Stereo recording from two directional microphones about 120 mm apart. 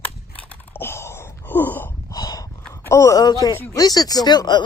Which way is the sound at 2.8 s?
25° left (ahead or behind).